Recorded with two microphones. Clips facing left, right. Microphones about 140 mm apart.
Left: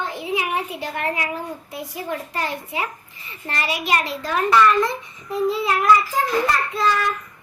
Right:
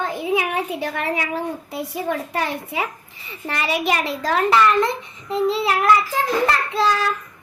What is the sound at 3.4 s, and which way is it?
Speech, 60° right (ahead or behind).